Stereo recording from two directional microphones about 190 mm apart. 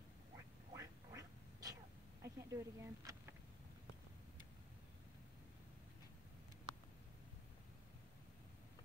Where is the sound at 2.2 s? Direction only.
15° right (ahead or behind).